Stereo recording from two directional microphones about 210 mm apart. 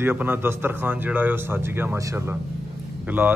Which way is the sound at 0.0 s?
10° right (ahead or behind).